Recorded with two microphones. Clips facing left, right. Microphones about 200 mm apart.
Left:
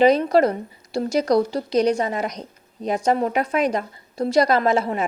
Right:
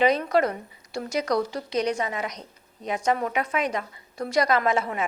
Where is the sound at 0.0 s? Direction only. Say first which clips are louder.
Left 6 dB; 35° left (ahead or behind).